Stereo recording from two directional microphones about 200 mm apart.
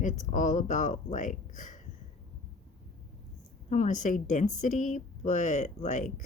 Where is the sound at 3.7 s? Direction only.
40° left (ahead or behind).